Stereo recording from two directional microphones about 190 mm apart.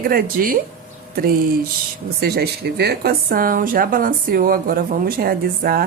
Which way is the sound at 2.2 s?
55° right (ahead or behind).